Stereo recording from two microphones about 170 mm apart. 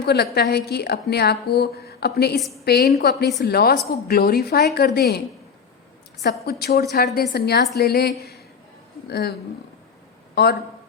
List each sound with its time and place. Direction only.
0.0 s a woman's voice: 75° left (ahead or behind)
6.4 s a woman's voice: 65° left (ahead or behind)
10.3 s speech: 70° left (ahead or behind)